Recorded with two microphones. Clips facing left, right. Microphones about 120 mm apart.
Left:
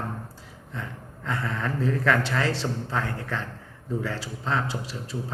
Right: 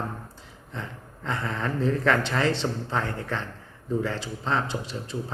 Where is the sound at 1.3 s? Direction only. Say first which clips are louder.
Even; 25° right (ahead or behind).